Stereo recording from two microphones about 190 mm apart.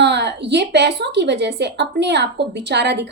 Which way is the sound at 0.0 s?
65° right (ahead or behind).